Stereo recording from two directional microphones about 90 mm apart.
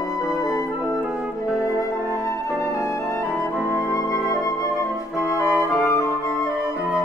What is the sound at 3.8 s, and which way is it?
Flute, 40° left (ahead or behind).